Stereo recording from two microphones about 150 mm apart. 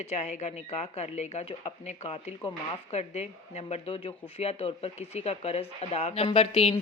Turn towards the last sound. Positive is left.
turn(degrees=40)  # may be behind; listen again after turning